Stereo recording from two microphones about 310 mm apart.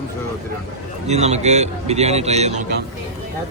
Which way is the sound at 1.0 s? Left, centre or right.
Right.